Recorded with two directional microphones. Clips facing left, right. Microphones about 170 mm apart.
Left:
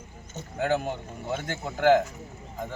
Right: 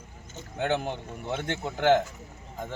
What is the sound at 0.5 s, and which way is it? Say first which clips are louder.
A man's voice: left 1 dB; 5° left (ahead or behind).